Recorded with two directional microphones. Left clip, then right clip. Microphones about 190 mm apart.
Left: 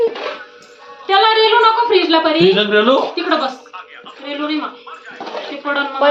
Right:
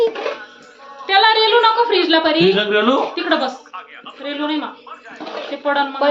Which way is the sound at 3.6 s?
25° right (ahead or behind).